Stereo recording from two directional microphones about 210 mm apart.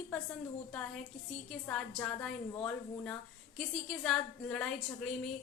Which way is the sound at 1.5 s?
5° left (ahead or behind).